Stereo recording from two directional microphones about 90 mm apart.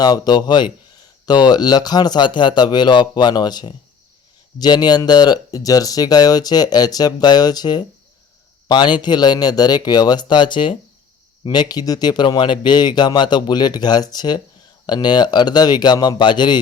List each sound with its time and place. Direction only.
0.0 s speech: 50° left (ahead or behind)